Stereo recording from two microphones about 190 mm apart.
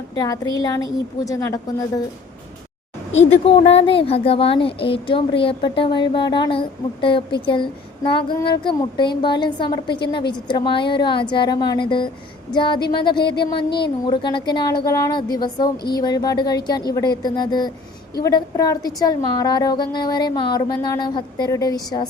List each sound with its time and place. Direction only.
0.2 s a woman's voice: 20° left (ahead or behind)
3.1 s speech: 35° left (ahead or behind); by 21.8 s 20° left (ahead or behind)